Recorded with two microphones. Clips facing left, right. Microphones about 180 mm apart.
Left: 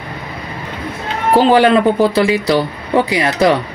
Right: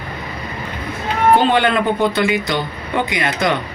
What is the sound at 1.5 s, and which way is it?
Speech, 35° left (ahead or behind).